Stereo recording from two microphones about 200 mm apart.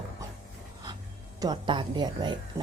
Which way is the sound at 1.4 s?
25° right (ahead or behind).